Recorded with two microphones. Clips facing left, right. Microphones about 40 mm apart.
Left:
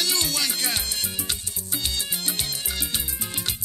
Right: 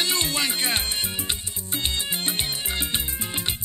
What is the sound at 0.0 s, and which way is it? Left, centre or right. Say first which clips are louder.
Music: right 1 dB; right.